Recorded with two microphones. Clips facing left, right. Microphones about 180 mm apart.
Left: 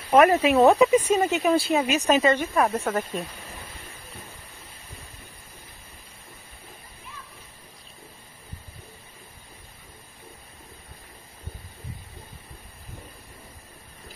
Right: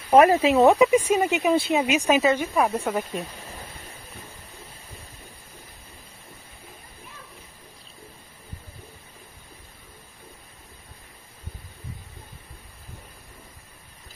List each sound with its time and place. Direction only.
0.1 s speech: 30° right (ahead or behind)
0.7 s a woman's voice: 15° right (ahead or behind)